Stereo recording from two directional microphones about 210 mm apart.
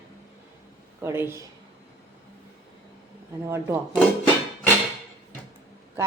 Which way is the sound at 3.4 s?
15° right (ahead or behind).